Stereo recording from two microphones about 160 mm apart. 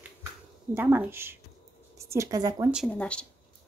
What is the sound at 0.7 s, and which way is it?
A woman's voice, 15° right (ahead or behind).